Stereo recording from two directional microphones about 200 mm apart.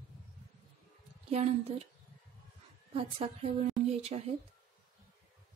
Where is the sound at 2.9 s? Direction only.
30° right (ahead or behind).